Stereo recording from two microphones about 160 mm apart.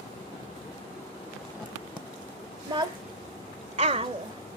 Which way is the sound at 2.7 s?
30° right (ahead or behind).